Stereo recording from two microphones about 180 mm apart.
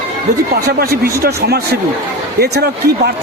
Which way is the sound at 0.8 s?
55° right (ahead or behind).